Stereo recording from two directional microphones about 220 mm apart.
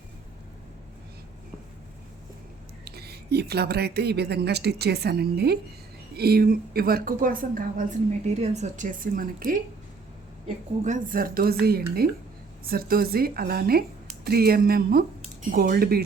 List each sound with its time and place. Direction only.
2.8 s a woman's voice: 45° right (ahead or behind)
10.8 s a woman's voice: 35° right (ahead or behind)